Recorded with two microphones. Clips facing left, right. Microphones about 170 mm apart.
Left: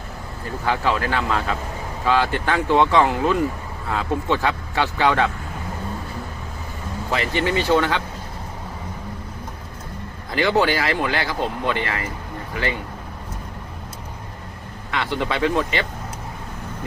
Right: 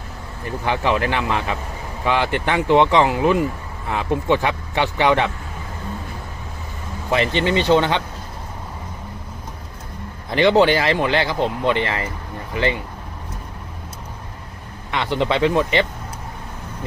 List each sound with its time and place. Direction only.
0.6 s speech: 20° right (ahead or behind)
7.1 s speech: 20° right (ahead or behind)
10.3 s speech: 20° right (ahead or behind)
14.8 s speech: 20° right (ahead or behind)